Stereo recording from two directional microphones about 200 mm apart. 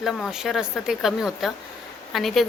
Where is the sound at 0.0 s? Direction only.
Centre (ahead or behind).